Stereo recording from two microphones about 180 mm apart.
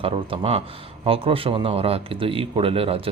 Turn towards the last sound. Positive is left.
turn(degrees=-30)  # may be behind; listen again after turning